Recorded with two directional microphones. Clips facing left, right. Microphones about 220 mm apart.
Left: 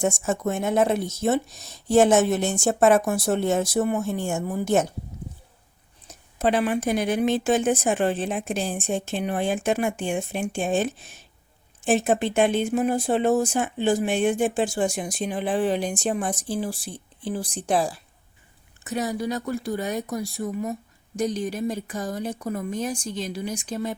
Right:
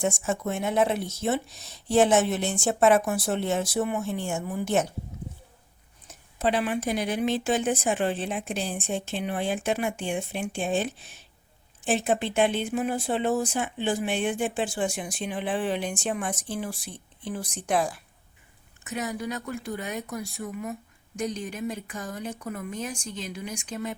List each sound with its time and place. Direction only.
0.0 s speech: 45° left (ahead or behind)
6.1 s speech: 45° left (ahead or behind)